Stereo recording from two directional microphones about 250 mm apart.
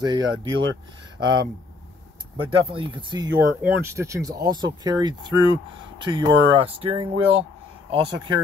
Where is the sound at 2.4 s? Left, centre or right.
Centre.